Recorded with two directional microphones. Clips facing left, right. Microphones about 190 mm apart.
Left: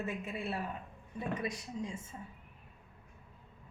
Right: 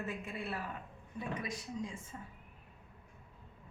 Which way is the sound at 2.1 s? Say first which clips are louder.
Left 1 dB; 25° left (ahead or behind).